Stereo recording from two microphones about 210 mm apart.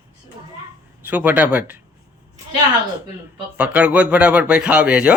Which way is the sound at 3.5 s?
5° right (ahead or behind).